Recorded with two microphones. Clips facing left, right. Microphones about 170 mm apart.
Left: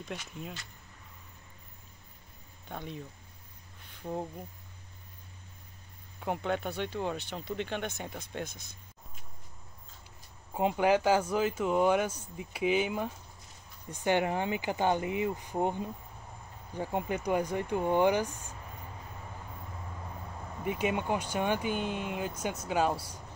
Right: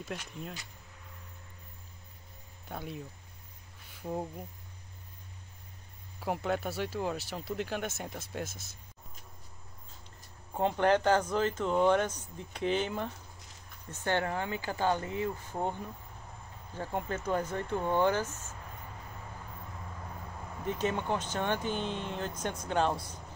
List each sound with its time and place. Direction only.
0.0 s speech: centre (ahead or behind)
2.7 s speech: 5° right (ahead or behind)
6.1 s speech: 5° right (ahead or behind)
10.5 s speech: 10° left (ahead or behind)
20.6 s speech: 10° left (ahead or behind)